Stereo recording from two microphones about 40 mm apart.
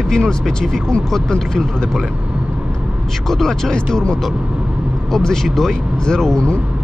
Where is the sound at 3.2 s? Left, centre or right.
Centre.